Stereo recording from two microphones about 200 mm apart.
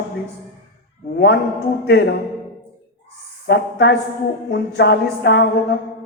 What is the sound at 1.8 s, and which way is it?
Speech, 55° left (ahead or behind).